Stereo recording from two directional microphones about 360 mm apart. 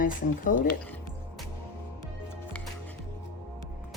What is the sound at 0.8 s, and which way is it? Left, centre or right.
Music, centre.